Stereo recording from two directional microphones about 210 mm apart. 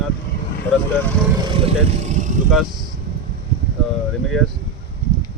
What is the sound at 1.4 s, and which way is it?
Speech, 25° right (ahead or behind).